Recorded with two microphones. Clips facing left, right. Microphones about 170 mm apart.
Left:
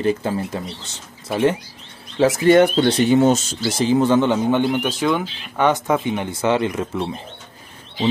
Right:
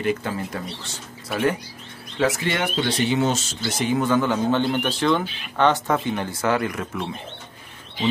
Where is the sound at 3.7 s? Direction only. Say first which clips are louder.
Left 5 dB; 30° left (ahead or behind).